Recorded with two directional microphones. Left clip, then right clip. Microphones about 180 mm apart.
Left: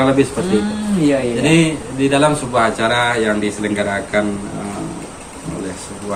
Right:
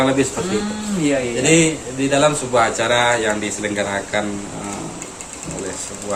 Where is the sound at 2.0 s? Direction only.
30° right (ahead or behind).